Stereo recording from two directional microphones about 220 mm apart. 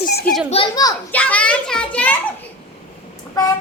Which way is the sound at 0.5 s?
20° left (ahead or behind).